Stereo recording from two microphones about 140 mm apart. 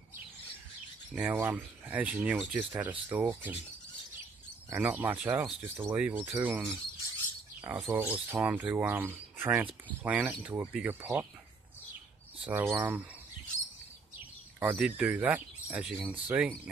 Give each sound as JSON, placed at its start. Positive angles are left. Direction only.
{"t": 1.1, "sound": "speech", "side_deg": -15}
{"t": 4.6, "sound": "speech", "side_deg": -15}
{"t": 7.9, "sound": "speech", "side_deg": -15}
{"t": 12.4, "sound": "speech", "side_deg": -15}
{"t": 14.6, "sound": "speech", "side_deg": -10}